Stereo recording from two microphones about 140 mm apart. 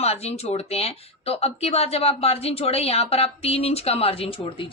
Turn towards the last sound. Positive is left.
turn(degrees=40)  # may be behind; listen again after turning